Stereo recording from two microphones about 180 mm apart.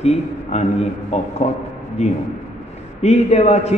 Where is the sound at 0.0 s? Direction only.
35° left (ahead or behind).